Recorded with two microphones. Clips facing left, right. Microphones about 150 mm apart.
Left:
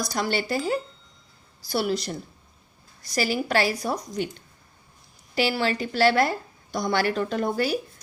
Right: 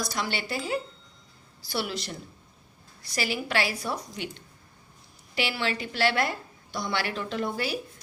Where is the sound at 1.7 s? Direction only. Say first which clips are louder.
Left 6 dB; 40° left (ahead or behind).